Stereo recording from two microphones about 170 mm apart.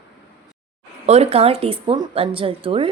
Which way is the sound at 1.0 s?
35° right (ahead or behind).